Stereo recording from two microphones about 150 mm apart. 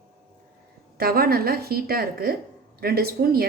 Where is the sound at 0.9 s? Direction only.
90° right.